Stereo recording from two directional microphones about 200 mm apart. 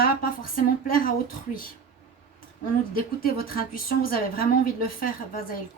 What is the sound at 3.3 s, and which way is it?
A woman's voice, 45° left (ahead or behind).